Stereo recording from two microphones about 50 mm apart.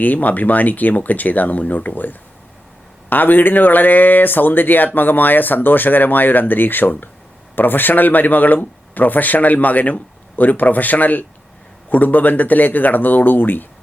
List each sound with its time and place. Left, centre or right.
0.0 s speech: left